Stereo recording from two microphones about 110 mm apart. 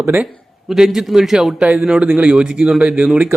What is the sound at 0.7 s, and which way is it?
A man's voice, 5° right (ahead or behind).